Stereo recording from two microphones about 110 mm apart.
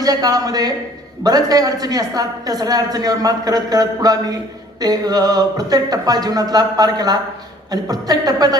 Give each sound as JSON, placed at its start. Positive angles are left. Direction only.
{"t": 0.0, "sound": "a woman's voice", "side_deg": -35}